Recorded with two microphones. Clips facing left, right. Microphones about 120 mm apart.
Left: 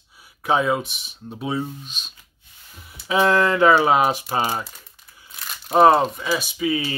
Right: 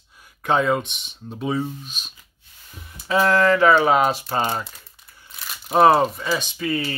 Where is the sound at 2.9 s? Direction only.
15° left (ahead or behind).